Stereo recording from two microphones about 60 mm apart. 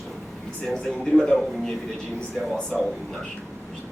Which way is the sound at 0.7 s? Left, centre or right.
Centre.